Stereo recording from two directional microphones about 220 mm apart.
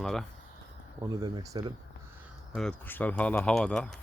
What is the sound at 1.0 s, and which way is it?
Speech, 20° right (ahead or behind).